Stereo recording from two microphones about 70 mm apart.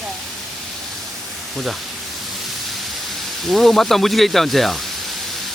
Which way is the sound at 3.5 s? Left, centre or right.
Centre.